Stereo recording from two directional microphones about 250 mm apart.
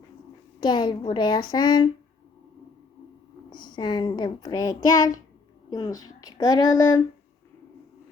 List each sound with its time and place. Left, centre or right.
0.6 s a child's voice: centre
3.6 s a child's voice: centre